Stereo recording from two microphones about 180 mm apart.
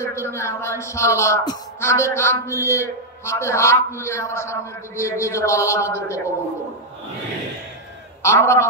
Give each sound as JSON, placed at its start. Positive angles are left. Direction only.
{"t": 0.0, "sound": "a man's voice", "side_deg": 15}
{"t": 8.2, "sound": "a man's voice", "side_deg": 15}